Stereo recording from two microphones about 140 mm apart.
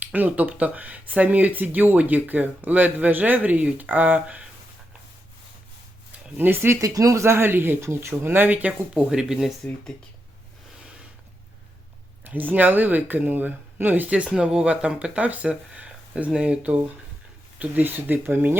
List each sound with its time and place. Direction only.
0.0 s speech: 10° right (ahead or behind)
6.3 s speech: 15° right (ahead or behind)
12.2 s speech: 10° right (ahead or behind)